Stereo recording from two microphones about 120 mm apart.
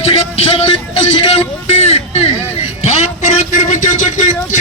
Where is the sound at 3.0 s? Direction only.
80° left.